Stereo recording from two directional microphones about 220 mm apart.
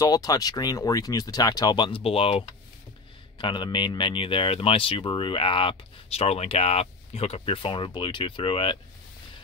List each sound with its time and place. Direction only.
0.0 s speech: 15° left (ahead or behind)